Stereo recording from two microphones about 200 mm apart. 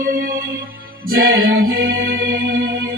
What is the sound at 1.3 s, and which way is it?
Music, 75° right (ahead or behind).